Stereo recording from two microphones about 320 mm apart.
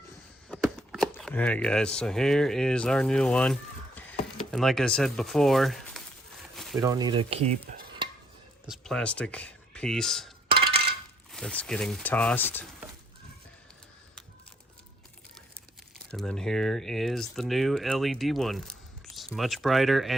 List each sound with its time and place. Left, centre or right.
0.4 s speech: centre
6.7 s stir: centre
8.6 s speech: centre
10.7 s coin: right
11.3 s speech: centre
16.1 s speech: centre